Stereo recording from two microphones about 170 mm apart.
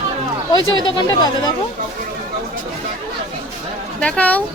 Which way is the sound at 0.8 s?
25° left (ahead or behind).